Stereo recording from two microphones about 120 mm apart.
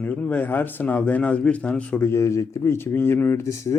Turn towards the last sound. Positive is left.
turn(degrees=25)  # may be behind; listen again after turning